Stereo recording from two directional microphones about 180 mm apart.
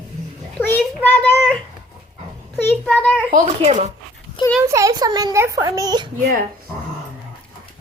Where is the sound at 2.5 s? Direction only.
10° left (ahead or behind).